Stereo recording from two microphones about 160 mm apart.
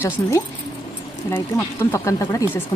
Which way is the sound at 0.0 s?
15° left (ahead or behind).